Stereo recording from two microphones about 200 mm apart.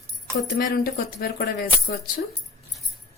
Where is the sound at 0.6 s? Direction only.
50° left (ahead or behind).